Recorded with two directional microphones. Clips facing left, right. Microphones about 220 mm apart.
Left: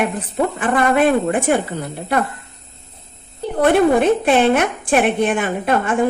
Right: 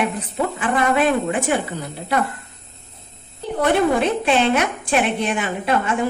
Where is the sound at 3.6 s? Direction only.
55° left (ahead or behind).